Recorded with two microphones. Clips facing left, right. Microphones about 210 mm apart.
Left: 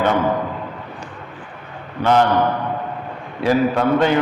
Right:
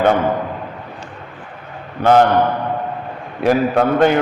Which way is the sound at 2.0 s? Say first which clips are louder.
Right 4 dB; 50° right (ahead or behind).